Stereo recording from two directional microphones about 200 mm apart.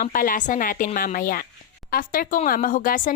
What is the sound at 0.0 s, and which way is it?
A woman's voice, 40° left (ahead or behind).